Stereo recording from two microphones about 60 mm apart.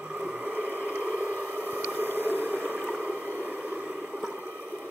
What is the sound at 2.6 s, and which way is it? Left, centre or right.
Boat, right.